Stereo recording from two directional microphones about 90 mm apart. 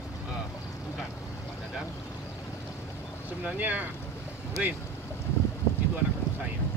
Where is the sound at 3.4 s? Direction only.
15° right (ahead or behind).